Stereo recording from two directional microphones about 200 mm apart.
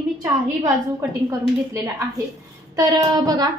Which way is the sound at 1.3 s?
15° right (ahead or behind).